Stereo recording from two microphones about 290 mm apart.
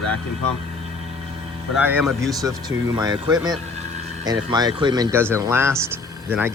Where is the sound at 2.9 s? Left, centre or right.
Centre.